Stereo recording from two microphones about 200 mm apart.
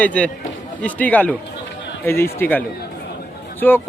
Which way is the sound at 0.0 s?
5° left (ahead or behind).